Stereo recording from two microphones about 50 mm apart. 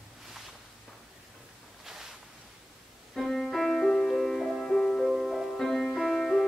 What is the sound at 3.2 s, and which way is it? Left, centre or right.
Music, centre.